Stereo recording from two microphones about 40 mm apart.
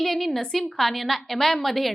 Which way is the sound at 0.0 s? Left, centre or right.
Centre.